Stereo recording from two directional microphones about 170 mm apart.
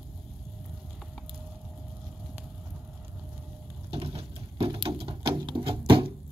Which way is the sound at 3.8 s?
35° right (ahead or behind).